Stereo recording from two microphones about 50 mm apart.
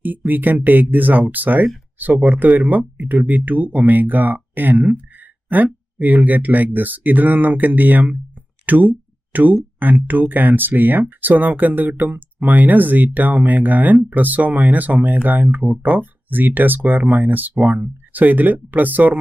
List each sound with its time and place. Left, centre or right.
0.3 s speech: right